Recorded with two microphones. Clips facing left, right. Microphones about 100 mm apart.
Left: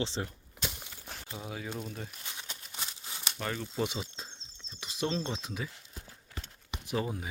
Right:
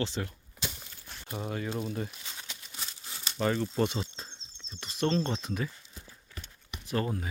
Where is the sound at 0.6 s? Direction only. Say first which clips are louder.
Even; 5° left (ahead or behind).